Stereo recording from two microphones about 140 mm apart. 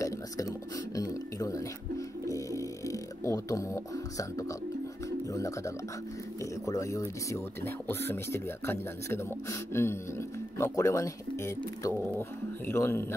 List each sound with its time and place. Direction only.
0.0 s music: 25° left (ahead or behind)
6.6 s speech: 20° left (ahead or behind)